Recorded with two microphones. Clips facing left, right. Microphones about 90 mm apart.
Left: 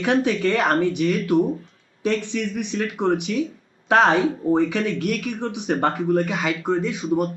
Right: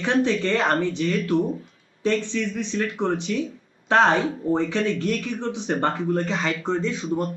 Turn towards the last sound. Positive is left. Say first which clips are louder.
# left 3 dB
turn(degrees=15)  # may be behind; listen again after turning